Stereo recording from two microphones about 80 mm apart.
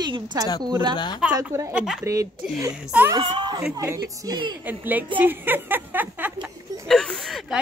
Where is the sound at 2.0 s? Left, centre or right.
Right.